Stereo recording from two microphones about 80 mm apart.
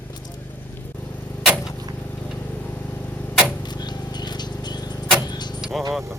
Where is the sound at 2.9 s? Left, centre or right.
Left.